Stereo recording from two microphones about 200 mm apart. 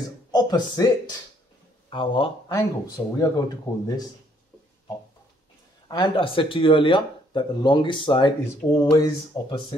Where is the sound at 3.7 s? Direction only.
20° left (ahead or behind).